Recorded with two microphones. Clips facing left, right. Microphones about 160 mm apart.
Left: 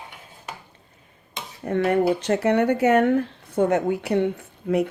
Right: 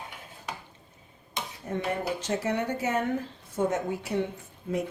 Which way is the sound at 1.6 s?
70° left (ahead or behind).